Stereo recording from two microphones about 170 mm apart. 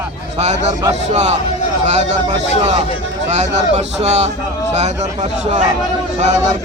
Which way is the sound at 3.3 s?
40° right (ahead or behind).